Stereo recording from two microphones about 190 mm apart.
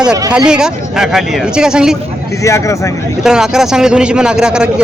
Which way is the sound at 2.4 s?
15° left (ahead or behind).